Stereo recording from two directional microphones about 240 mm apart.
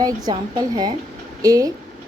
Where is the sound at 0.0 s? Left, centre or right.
Centre.